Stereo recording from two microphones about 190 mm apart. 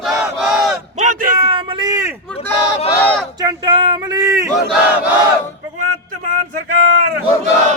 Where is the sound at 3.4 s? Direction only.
20° right (ahead or behind).